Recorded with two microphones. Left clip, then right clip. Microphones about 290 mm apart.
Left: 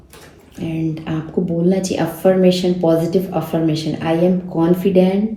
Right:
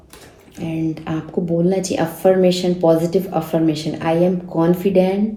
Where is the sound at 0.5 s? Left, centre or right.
Right.